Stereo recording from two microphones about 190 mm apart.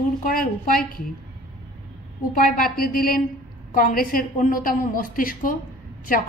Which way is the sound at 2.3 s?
50° left (ahead or behind).